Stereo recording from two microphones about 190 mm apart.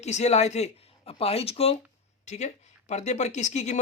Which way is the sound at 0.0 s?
35° left (ahead or behind).